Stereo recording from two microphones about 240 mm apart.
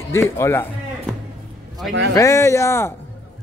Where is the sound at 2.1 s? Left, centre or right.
Centre.